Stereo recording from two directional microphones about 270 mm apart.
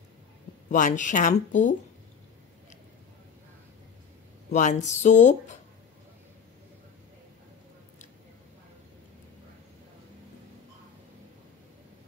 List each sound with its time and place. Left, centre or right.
0.7 s speech: left
4.5 s speech: left